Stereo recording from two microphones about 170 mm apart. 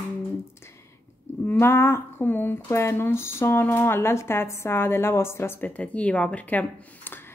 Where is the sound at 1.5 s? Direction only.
15° left (ahead or behind).